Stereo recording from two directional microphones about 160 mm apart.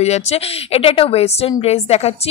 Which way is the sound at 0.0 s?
40° left (ahead or behind).